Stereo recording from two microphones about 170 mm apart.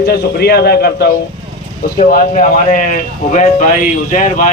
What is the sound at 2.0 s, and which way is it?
A man's voice, 45° left (ahead or behind).